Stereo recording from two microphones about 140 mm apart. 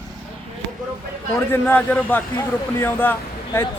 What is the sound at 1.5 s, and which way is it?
A man's voice, 15° left (ahead or behind).